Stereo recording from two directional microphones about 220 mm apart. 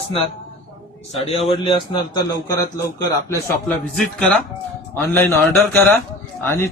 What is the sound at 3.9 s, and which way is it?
A man's voice, 5° left (ahead or behind).